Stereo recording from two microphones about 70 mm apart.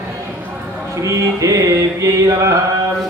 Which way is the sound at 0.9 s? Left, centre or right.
Right.